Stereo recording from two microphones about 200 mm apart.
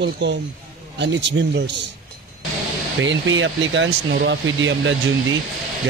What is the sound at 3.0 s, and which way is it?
Speech, 70° right (ahead or behind).